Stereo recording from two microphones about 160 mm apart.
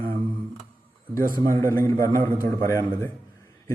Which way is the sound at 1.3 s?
15° left (ahead or behind).